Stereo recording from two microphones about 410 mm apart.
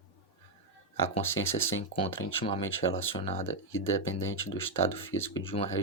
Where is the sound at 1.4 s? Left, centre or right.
Centre.